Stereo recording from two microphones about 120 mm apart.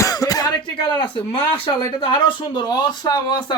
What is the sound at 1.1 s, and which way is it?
Speech, 45° left (ahead or behind).